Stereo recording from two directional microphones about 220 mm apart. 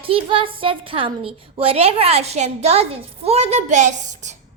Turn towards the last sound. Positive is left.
turn(degrees=-35)  # may be behind; listen again after turning